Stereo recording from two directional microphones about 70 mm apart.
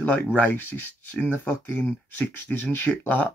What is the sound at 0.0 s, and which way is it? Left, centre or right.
Speech, left.